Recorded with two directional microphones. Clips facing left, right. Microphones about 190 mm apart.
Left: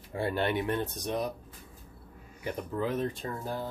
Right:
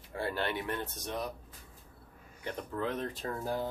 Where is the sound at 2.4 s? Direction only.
5° left (ahead or behind).